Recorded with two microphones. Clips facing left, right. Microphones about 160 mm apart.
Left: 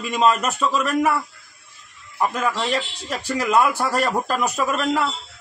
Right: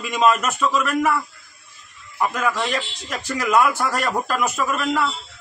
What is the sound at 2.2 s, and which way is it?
A man's voice, 30° left (ahead or behind).